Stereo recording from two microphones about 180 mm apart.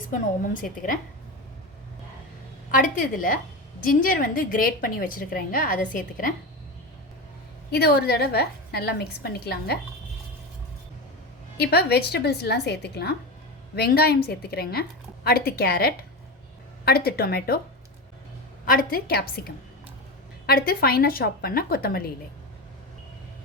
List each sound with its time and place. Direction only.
0.1 s a woman's voice: 50° left (ahead or behind)
2.7 s a woman's voice: 50° left (ahead or behind)
7.7 s a woman's voice: 60° left (ahead or behind)
11.5 s a woman's voice: 60° left (ahead or behind)
18.6 s a woman's voice: 50° left (ahead or behind)
20.5 s a woman's voice: 55° left (ahead or behind)